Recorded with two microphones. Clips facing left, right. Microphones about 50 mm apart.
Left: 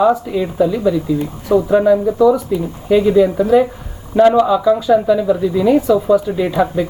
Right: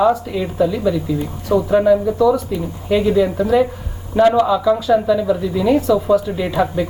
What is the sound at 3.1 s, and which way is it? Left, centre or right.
Speech, centre.